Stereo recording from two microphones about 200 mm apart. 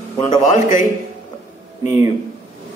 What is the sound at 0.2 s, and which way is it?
Speech, 40° left (ahead or behind).